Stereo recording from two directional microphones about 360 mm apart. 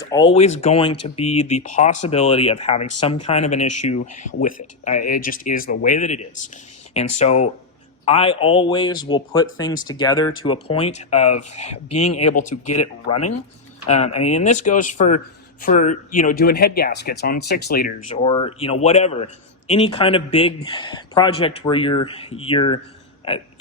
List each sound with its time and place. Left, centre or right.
0.0 s speech: centre
11.9 s speech: left
12.2 s speech: left
12.6 s speech: left
13.1 s speech: centre